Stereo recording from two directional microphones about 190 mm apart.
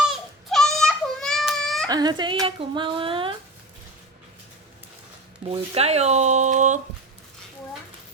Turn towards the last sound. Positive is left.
turn(degrees=-40)  # may be behind; listen again after turning